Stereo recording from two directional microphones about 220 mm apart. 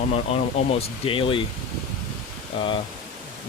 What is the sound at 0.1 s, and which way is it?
Speech, 25° left (ahead or behind).